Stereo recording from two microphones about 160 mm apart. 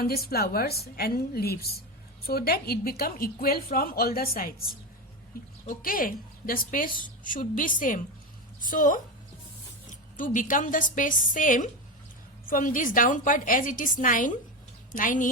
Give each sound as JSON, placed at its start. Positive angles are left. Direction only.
{"t": 0.0, "sound": "a woman's voice", "side_deg": 75}
{"t": 10.2, "sound": "a woman's voice", "side_deg": 55}